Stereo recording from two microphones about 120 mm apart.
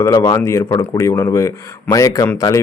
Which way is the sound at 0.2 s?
25° left (ahead or behind).